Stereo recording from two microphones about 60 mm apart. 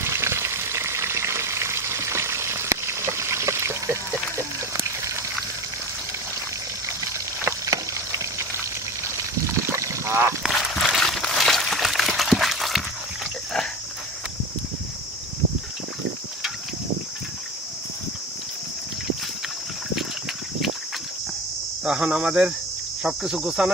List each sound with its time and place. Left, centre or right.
0.0 s frying: right
4.4 s a sound: right
6.8 s boiling: right
9.6 s duck: right
10.5 s a sound: centre
21.8 s cricket: centre